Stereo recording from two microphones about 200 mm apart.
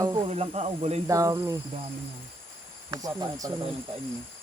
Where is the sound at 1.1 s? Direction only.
15° right (ahead or behind).